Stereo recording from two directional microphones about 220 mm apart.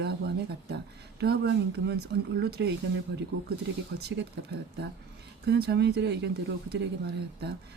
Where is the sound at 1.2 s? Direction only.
50° right (ahead or behind).